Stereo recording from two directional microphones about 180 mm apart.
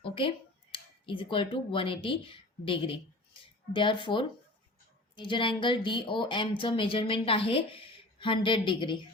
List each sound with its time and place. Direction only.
0.0 s speech: 30° left (ahead or behind)